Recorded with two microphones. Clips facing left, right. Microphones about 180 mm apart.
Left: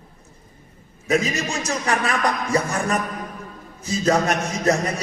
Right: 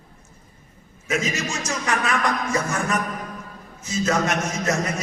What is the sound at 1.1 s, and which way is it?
A man's voice, 35° left (ahead or behind).